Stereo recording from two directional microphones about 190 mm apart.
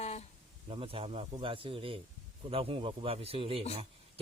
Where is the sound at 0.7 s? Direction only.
30° right (ahead or behind).